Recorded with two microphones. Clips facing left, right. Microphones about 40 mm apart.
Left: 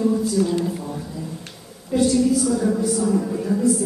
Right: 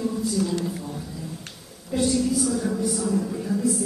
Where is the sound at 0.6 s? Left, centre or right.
Centre.